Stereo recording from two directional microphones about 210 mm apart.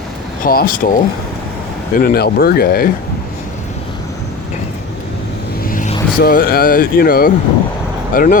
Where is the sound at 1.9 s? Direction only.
45° left (ahead or behind).